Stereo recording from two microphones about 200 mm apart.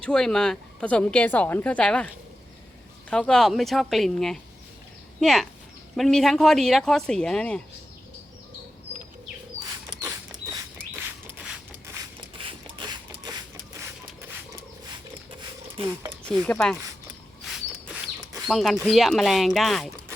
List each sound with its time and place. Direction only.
0.0 s a woman's voice: 5° left (ahead or behind)
3.1 s a woman's voice: 5° left (ahead or behind)
11.3 s a sound: 10° right (ahead or behind)
12.4 s a sound: 25° right (ahead or behind)
15.8 s speech: 30° right (ahead or behind)
16.3 s a woman's voice: 5° left (ahead or behind)
17.5 s bird: centre (ahead or behind)
18.4 s a woman's voice: centre (ahead or behind)